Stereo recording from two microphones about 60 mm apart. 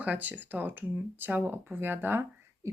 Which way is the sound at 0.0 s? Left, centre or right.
Right.